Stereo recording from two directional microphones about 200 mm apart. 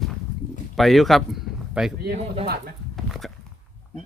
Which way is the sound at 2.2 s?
30° right (ahead or behind).